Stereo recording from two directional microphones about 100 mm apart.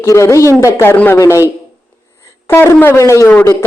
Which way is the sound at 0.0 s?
30° left (ahead or behind).